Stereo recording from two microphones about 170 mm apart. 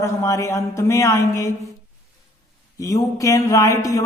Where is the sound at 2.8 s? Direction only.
20° left (ahead or behind).